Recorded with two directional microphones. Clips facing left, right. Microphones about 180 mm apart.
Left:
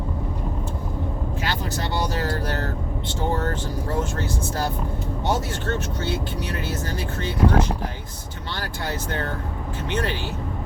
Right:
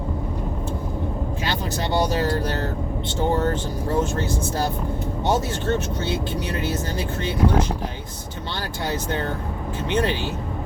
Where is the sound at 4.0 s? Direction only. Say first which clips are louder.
Right 5 dB; 20° right (ahead or behind).